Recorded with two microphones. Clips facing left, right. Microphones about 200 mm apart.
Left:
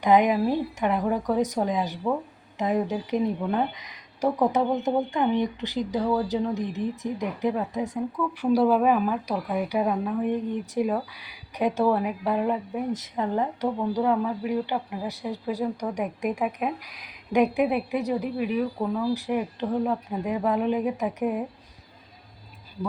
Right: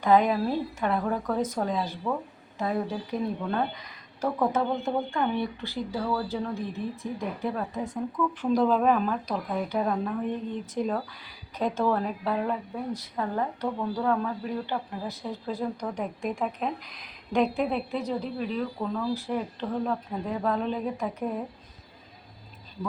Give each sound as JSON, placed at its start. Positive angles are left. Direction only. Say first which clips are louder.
{"t": 0.0, "sound": "speech", "louder": "left 2 dB", "side_deg": 15}